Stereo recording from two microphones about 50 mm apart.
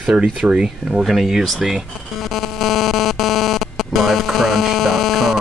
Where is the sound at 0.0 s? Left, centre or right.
Centre.